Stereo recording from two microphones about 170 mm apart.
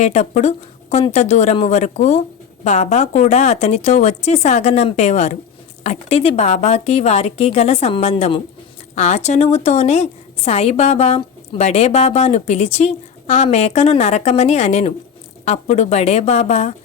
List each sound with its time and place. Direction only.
0.0 s a woman's voice: 40° left (ahead or behind)